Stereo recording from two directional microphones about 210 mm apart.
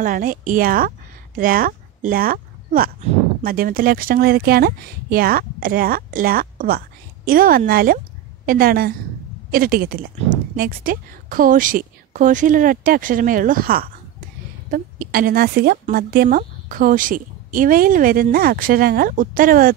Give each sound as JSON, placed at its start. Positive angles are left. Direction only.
{"t": 0.0, "sound": "a woman's voice", "side_deg": -40}